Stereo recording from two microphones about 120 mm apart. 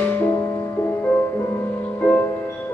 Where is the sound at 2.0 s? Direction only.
10° left (ahead or behind).